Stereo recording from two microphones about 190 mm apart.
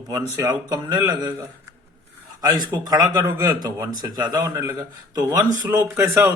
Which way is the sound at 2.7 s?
20° right (ahead or behind).